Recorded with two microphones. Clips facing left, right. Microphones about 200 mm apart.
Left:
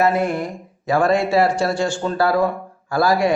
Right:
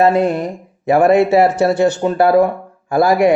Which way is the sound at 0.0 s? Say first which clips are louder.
Right 5 dB; 30° right (ahead or behind).